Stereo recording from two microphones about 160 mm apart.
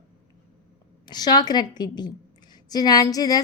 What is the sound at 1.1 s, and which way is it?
A woman's voice, 25° left (ahead or behind).